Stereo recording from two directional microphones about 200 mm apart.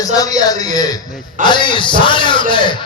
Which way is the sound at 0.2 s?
20° left (ahead or behind).